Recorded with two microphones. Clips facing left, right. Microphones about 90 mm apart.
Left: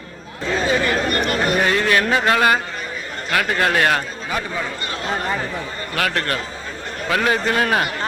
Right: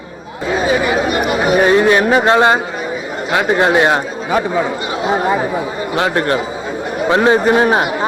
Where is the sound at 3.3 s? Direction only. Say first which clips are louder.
Right 6 dB; 20° right (ahead or behind).